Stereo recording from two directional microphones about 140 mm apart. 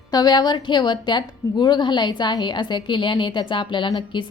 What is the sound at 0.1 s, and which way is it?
A woman's voice, 30° left (ahead or behind).